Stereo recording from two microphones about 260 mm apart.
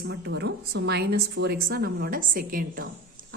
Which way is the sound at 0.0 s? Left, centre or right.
Right.